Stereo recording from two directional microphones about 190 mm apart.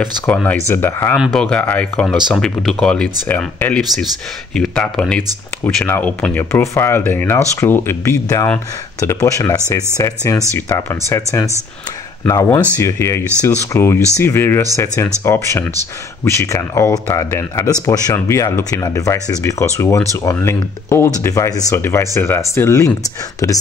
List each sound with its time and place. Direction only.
0.0 s speech: 5° left (ahead or behind)
12.3 s speech: 10° left (ahead or behind)